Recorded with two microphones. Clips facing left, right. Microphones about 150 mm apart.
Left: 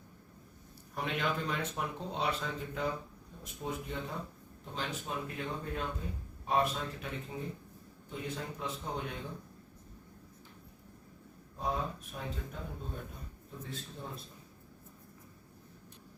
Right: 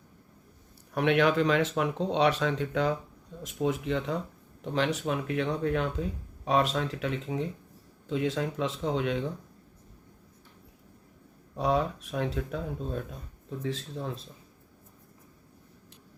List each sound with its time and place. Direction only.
0.9 s speech: 75° right (ahead or behind)
4.6 s speech: 75° right (ahead or behind); by 9.3 s 90° right
11.5 s speech: 85° right